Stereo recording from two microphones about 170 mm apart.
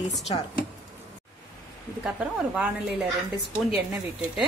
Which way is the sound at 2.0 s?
5° right (ahead or behind).